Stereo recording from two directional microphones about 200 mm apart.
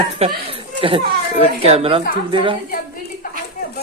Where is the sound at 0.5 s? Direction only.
25° right (ahead or behind).